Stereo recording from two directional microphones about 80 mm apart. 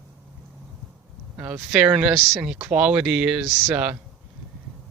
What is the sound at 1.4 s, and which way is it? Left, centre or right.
Speech, centre.